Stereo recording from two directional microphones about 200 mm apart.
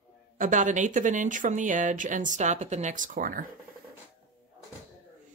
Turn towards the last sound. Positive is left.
turn(degrees=-45)  # may be behind; listen again after turning